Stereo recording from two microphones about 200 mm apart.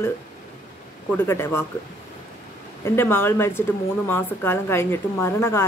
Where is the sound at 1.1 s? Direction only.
10° left (ahead or behind).